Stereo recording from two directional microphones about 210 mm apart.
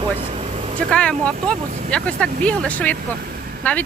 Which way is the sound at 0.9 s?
5° left (ahead or behind).